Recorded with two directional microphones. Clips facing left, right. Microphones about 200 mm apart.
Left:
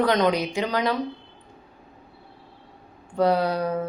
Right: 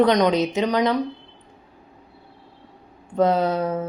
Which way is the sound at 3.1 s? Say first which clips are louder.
Right 2 dB; 20° right (ahead or behind).